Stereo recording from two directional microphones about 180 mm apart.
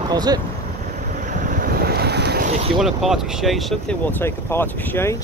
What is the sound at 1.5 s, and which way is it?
Boat, 55° right (ahead or behind).